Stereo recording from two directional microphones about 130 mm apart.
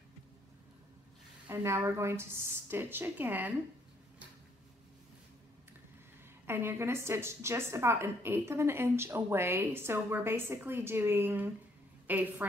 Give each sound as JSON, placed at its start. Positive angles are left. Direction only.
{"t": 1.5, "sound": "a woman's voice", "side_deg": -20}
{"t": 6.4, "sound": "a woman's voice", "side_deg": -15}